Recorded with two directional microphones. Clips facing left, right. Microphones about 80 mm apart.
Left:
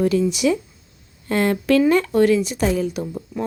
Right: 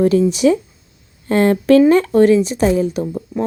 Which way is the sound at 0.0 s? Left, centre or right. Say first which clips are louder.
Right 5 dB; right.